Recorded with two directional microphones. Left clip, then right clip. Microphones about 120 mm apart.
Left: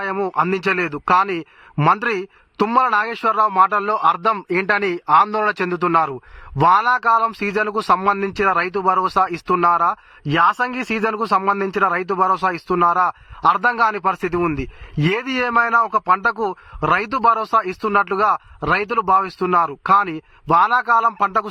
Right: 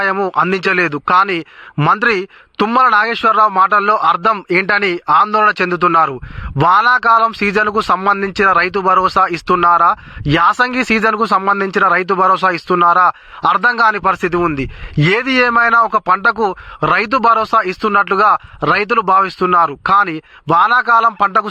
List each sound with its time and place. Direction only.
0.0 s a man's voice: 25° right (ahead or behind)